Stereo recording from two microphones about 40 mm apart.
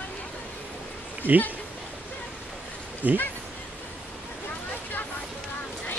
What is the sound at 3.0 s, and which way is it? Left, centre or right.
Speech, right.